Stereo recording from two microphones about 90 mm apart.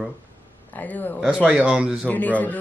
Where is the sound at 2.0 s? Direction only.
15° left (ahead or behind).